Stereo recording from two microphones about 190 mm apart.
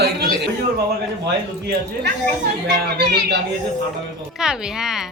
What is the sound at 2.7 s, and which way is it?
Music, 60° right (ahead or behind).